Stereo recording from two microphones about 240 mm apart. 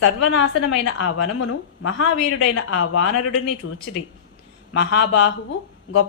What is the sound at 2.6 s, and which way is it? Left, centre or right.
Speech, left.